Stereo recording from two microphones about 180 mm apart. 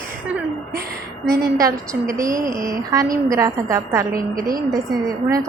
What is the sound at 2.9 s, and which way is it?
A woman's voice, 20° right (ahead or behind).